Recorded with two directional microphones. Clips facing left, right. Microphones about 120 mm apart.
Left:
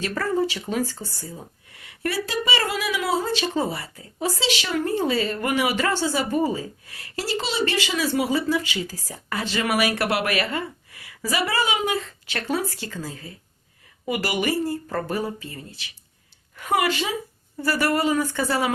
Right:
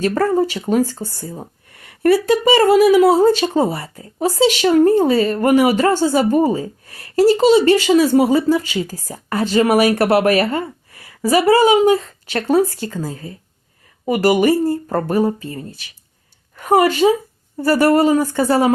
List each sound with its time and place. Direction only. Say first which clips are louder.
0.0 s speech: right 8 dB; 45° right (ahead or behind)